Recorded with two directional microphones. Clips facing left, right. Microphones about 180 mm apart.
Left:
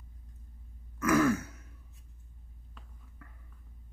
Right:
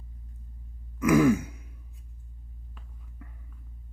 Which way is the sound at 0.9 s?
15° right (ahead or behind).